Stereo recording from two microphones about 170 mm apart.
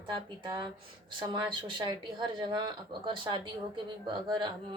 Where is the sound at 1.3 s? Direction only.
30° right (ahead or behind).